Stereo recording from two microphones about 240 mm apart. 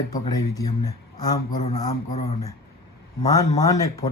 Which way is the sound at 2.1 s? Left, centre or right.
Left.